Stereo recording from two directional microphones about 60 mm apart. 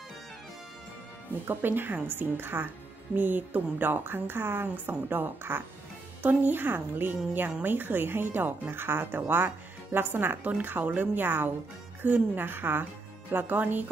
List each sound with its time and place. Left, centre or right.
1.5 s a woman's voice: right